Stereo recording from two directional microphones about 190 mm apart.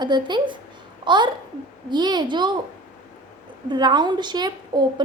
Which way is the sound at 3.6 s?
25° right (ahead or behind).